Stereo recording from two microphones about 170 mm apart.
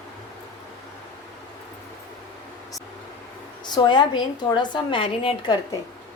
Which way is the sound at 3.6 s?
25° left (ahead or behind).